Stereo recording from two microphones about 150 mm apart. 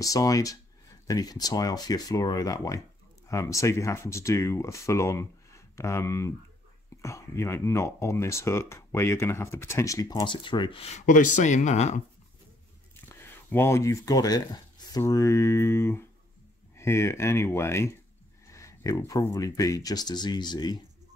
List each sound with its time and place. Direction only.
0.0 s speech: 25° left (ahead or behind); by 12.0 s 50° left (ahead or behind)
13.2 s speech: 15° left (ahead or behind)